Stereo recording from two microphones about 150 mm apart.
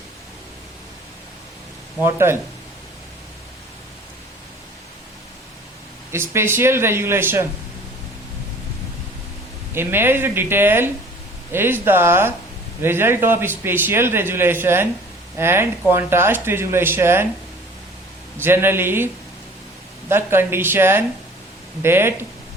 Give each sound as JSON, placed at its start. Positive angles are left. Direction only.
{"t": 2.0, "sound": "a man's voice", "side_deg": -15}
{"t": 6.1, "sound": "a man's voice", "side_deg": -15}
{"t": 9.7, "sound": "a man's voice", "side_deg": -15}
{"t": 18.3, "sound": "a man's voice", "side_deg": -15}